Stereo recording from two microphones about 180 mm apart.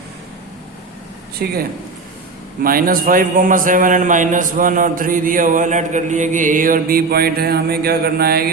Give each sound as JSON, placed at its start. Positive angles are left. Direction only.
{"t": 1.4, "sound": "speech", "side_deg": -60}
{"t": 2.6, "sound": "a man's voice", "side_deg": -55}